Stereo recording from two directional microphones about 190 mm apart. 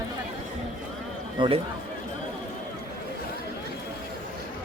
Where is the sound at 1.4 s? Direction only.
25° right (ahead or behind).